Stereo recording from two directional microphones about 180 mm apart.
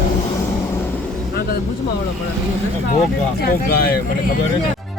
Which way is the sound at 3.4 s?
60° left (ahead or behind).